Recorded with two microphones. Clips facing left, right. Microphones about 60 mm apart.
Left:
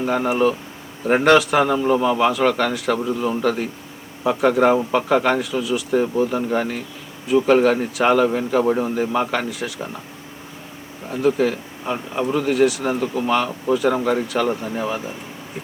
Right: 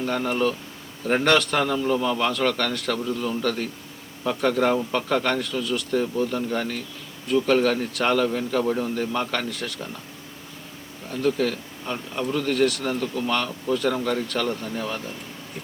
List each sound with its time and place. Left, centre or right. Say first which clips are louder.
0.0 s a man's voice: left 5 dB; centre
11.1 s a man's voice: left 5 dB; centre